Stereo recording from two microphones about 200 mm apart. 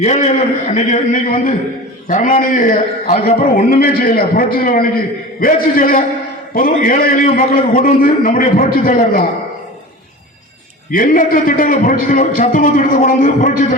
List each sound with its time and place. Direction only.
0.0 s a man's voice: 35° left (ahead or behind)
10.9 s a man's voice: 45° left (ahead or behind)